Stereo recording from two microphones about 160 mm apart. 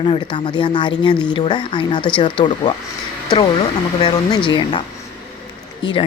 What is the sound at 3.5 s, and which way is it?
Speech, 40° left (ahead or behind).